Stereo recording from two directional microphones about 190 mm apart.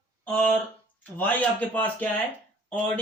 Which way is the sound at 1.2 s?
10° left (ahead or behind).